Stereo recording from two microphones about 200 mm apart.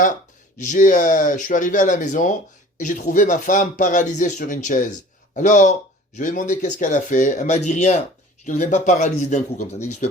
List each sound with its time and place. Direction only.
0.0 s speech: 40° left (ahead or behind)